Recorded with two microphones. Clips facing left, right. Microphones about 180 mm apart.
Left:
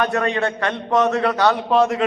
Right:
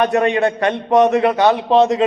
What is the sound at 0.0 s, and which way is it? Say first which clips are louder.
A man's voice: right 5 dB; 20° right (ahead or behind).